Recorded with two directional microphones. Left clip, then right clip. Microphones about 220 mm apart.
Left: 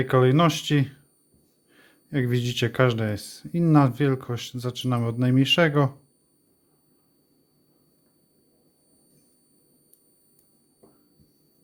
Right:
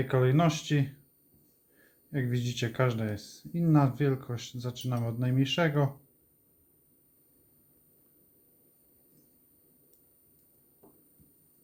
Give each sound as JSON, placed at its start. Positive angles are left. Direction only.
{"t": 0.1, "sound": "speech", "side_deg": 45}